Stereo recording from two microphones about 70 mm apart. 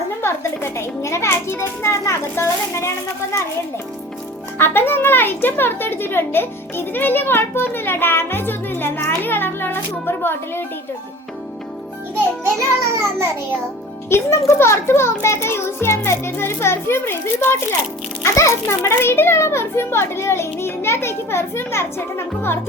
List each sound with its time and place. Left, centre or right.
0.2 s a child's voice: left
4.5 s speech: left
12.5 s music: right
14.1 s speech: left